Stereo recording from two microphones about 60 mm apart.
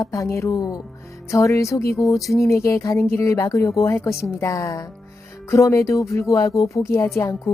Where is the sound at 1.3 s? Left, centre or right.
Left.